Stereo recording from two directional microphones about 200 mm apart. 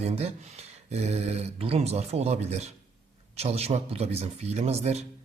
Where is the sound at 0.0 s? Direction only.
30° right (ahead or behind).